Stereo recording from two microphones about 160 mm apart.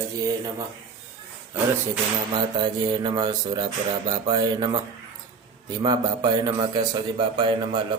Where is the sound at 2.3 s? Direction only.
25° right (ahead or behind).